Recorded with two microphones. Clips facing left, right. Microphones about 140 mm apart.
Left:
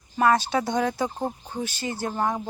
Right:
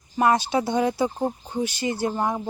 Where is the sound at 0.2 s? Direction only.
15° right (ahead or behind).